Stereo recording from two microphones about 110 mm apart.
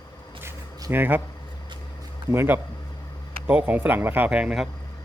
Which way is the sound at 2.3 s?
20° right (ahead or behind).